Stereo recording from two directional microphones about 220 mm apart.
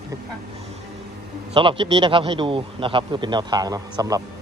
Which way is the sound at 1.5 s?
20° right (ahead or behind).